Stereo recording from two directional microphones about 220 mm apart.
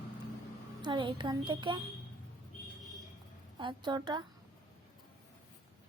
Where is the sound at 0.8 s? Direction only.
20° right (ahead or behind).